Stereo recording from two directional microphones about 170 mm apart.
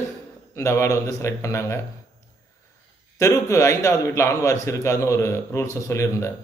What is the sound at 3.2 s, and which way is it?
A man's voice, 15° left (ahead or behind).